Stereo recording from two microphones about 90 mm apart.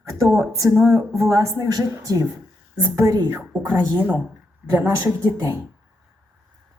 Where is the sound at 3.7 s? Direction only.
20° right (ahead or behind).